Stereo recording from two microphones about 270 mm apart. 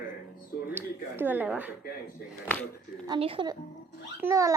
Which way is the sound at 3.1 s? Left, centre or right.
Centre.